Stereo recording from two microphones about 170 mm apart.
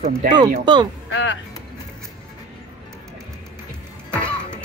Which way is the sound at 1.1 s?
90° left.